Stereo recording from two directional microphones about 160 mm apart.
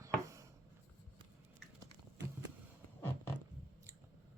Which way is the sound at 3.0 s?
15° left (ahead or behind).